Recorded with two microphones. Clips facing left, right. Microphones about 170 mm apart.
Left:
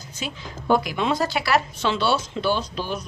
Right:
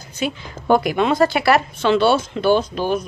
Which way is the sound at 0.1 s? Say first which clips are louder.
Right 9 dB; 60° right (ahead or behind).